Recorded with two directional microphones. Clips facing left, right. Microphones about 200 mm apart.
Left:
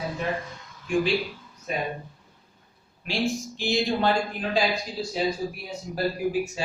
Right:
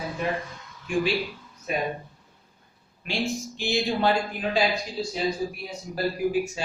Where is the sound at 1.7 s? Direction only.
5° right (ahead or behind).